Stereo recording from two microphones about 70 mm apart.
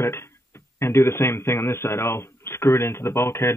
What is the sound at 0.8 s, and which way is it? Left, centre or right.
Speech, left.